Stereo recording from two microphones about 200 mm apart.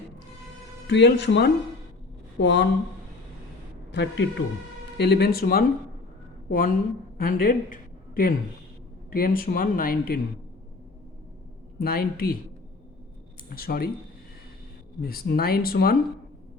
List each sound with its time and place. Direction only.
0.9 s speech: 60° left (ahead or behind)
3.9 s speech: 60° left (ahead or behind)
11.8 s speech: 50° left (ahead or behind)
13.6 s speech: 50° left (ahead or behind)
15.0 s speech: 50° left (ahead or behind)